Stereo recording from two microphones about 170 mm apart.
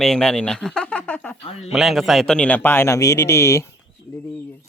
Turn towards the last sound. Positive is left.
turn(degrees=15)  # may be behind; listen again after turning